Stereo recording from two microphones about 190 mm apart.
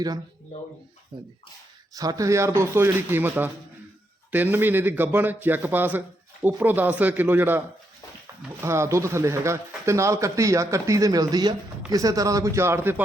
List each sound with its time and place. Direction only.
1.9 s speech: 20° right (ahead or behind)
8.6 s speech: 15° right (ahead or behind)